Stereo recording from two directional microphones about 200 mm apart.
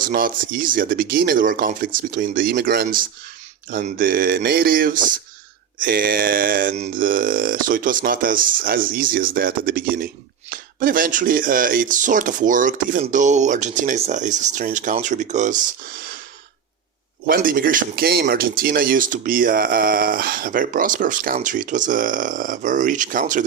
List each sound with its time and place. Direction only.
0.0 s speech: 45° right (ahead or behind)
17.2 s speech: 45° right (ahead or behind)